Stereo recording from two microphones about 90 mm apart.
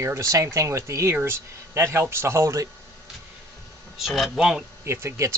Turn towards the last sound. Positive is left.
turn(degrees=-30)  # may be behind; listen again after turning